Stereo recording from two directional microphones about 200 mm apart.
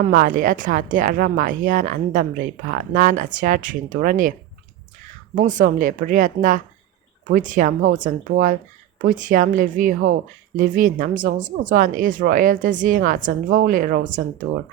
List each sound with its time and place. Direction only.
0.1 s speech: 45° right (ahead or behind)